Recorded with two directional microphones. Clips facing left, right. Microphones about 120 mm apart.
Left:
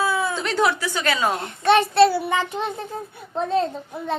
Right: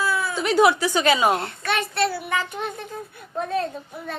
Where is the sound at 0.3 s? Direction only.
10° right (ahead or behind).